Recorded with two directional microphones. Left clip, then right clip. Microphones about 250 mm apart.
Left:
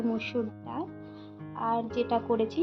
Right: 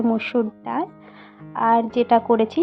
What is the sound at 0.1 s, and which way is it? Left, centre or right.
A woman's voice, right.